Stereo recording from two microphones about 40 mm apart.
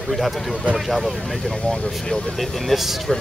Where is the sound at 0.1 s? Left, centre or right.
Centre.